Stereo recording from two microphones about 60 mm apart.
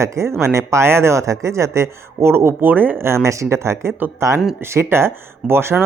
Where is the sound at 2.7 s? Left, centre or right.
Right.